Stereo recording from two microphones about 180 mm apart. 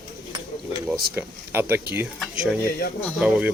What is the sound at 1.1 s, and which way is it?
Speech, 10° right (ahead or behind).